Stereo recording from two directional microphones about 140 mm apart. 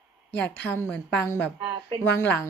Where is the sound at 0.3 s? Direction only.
10° left (ahead or behind).